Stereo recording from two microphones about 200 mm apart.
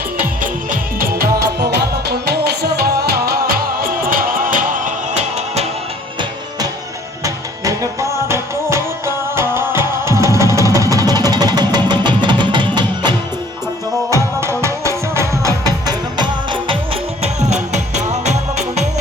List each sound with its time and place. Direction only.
0.7 s music: 45° right (ahead or behind)
7.6 s music: 15° right (ahead or behind); by 18.9 s 35° right (ahead or behind)